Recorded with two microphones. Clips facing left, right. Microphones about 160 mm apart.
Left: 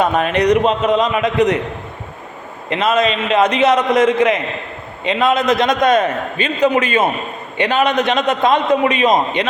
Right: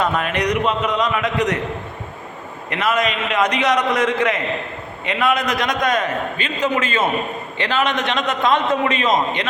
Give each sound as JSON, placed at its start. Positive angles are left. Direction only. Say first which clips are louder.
{"t": 0.0, "sound": "a man's voice", "louder": "left 5 dB", "side_deg": 25}
{"t": 2.6, "sound": "a man's voice", "louder": "left 4 dB", "side_deg": 25}